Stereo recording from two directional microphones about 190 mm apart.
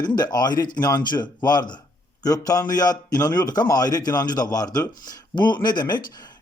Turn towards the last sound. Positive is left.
turn(degrees=20)  # may be behind; listen again after turning